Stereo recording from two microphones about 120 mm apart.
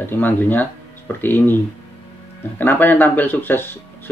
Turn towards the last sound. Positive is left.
turn(degrees=15)  # may be behind; listen again after turning